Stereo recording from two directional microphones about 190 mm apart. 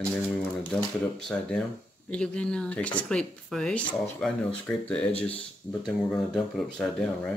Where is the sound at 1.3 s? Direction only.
5° left (ahead or behind).